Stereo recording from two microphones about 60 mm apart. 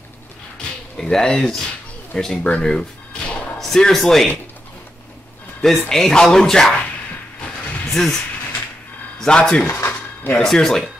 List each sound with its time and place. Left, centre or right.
0.9 s speech: centre
2.6 s music: centre
3.5 s speech: centre
5.9 s speech: centre
9.2 s speech: centre
9.7 s a sound: left
10.4 s speech: centre